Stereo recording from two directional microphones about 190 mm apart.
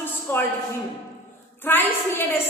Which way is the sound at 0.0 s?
10° left (ahead or behind).